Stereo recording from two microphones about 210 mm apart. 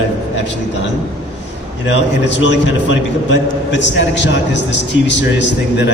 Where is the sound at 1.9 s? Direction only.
60° left (ahead or behind).